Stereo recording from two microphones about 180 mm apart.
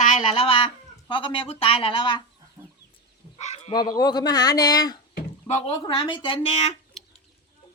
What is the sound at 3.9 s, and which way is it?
Speech, 20° left (ahead or behind).